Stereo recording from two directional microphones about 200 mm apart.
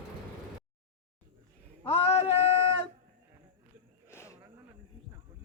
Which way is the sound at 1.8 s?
30° left (ahead or behind).